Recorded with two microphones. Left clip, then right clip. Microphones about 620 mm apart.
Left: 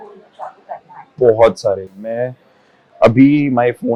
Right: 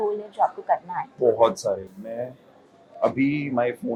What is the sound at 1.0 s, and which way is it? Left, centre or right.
Speech, right.